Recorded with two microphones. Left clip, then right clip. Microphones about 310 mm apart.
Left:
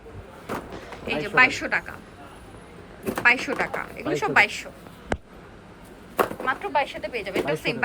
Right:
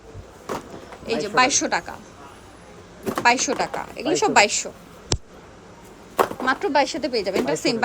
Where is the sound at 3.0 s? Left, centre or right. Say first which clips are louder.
Right 2 dB; centre.